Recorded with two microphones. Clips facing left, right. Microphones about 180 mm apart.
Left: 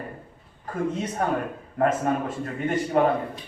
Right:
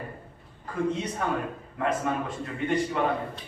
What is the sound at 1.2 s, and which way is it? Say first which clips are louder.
A man's voice: left 3 dB; 40° left (ahead or behind).